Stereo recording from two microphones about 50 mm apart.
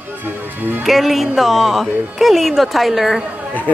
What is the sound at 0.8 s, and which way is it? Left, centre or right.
Speech, centre.